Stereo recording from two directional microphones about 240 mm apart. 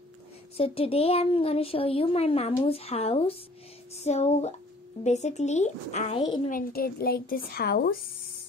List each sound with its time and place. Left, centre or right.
0.6 s speech: left
6.5 s a woman's voice: left